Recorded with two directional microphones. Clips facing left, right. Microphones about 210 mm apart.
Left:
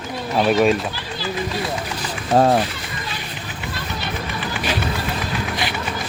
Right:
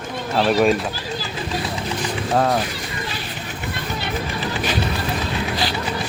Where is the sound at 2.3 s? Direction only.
30° left (ahead or behind).